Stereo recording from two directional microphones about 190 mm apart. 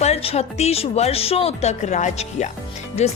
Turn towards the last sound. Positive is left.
turn(degrees=35)  # may be behind; listen again after turning